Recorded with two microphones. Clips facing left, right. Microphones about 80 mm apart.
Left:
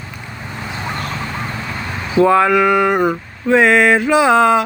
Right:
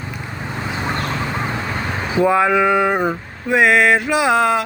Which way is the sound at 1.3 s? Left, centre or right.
Right.